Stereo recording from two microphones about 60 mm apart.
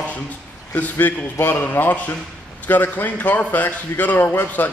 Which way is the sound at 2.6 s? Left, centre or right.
Left.